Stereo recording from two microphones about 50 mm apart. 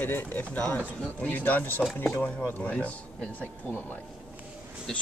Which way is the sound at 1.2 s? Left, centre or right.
Left.